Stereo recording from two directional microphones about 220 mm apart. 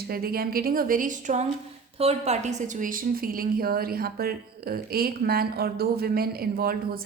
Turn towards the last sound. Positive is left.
turn(degrees=-45)  # may be behind; listen again after turning